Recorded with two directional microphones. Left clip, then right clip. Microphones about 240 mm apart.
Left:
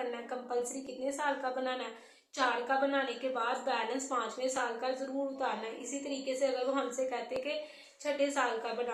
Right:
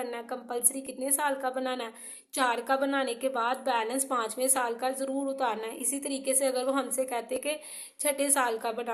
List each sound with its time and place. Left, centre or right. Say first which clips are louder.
1.0 s a woman's voice: right 4 dB; right